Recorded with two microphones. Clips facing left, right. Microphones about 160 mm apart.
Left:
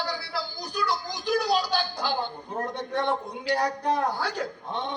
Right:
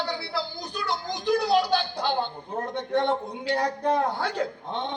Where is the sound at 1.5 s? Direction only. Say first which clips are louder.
Right 6 dB; 55° right (ahead or behind).